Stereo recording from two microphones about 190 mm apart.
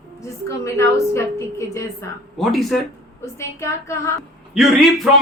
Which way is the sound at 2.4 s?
Centre (ahead or behind).